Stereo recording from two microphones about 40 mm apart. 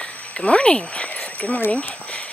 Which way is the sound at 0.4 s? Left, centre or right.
Left.